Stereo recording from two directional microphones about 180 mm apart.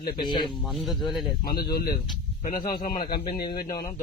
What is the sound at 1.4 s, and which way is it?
Speech, 55° left (ahead or behind).